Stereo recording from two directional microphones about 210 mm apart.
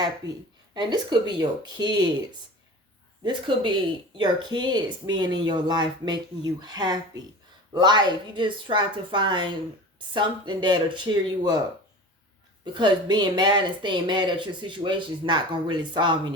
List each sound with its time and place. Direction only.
0.2 s speech: 20° right (ahead or behind)
3.2 s speech: 25° right (ahead or behind)
12.7 s speech: 20° right (ahead or behind)